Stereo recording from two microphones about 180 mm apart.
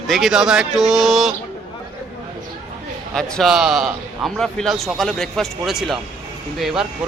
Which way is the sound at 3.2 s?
Centre (ahead or behind).